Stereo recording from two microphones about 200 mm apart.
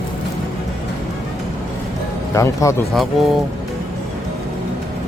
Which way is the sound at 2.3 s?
15° left (ahead or behind).